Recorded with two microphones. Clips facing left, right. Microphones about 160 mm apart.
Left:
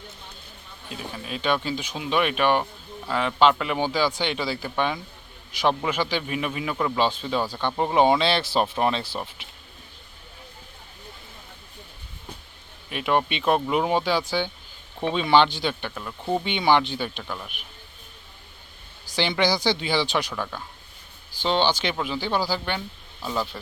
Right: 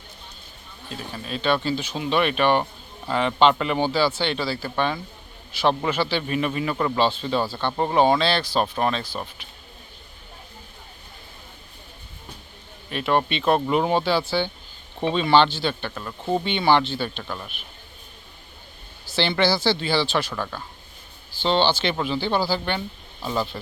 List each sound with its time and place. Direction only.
0.9 s a man's voice: 10° left (ahead or behind)
12.9 s speech: 10° left (ahead or behind)
16.0 s speech: 5° left (ahead or behind)
17.2 s a man's voice: centre (ahead or behind)
19.0 s speech: 15° left (ahead or behind)
20.3 s a man's voice: centre (ahead or behind)
21.3 s speech: 10° left (ahead or behind)
23.2 s speech: 5° right (ahead or behind)